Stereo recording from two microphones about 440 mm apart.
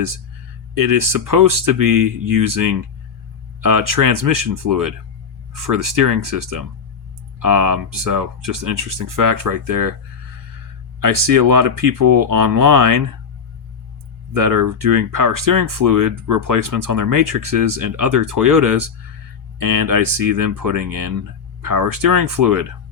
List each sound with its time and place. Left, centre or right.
0.7 s speech: right
11.0 s speech: right
14.3 s speech: right